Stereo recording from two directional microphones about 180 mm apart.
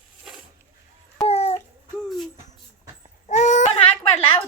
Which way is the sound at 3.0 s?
40° left (ahead or behind).